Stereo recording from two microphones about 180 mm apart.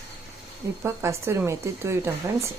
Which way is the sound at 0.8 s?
15° right (ahead or behind).